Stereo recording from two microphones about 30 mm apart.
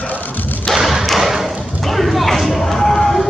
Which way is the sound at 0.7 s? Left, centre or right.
Centre.